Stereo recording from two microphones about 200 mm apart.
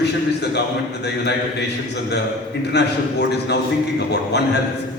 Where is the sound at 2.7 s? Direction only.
55° left (ahead or behind).